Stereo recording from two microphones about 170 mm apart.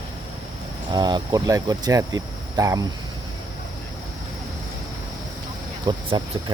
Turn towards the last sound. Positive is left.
turn(degrees=-25)  # may be behind; listen again after turning